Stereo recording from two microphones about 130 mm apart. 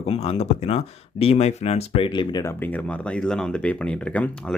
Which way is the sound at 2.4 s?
15° left (ahead or behind).